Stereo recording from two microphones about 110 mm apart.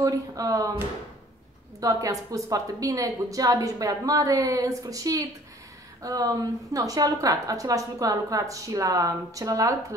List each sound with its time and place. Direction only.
0.0 s a woman's voice: 30° right (ahead or behind)